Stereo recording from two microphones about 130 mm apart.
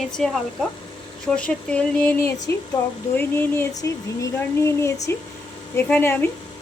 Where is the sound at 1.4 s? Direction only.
10° left (ahead or behind).